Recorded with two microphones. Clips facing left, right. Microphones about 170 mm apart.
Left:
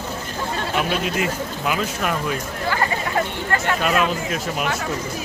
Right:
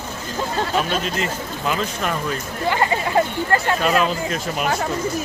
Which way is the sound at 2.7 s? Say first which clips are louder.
Right 3 dB; 20° right (ahead or behind).